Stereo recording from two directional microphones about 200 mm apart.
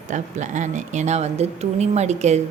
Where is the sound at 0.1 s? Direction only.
35° right (ahead or behind).